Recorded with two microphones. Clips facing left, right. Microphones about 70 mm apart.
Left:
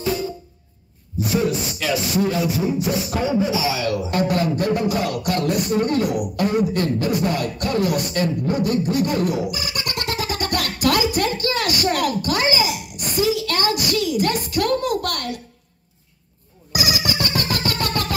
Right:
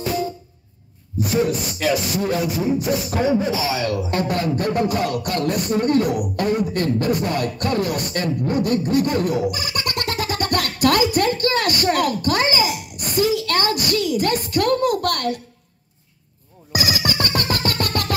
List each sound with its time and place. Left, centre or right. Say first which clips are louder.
1.8 s a man's voice: even; right
16.7 s music: right 1 dB; right